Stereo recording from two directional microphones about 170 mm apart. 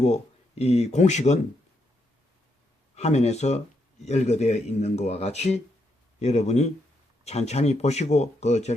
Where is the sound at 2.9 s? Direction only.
40° left (ahead or behind).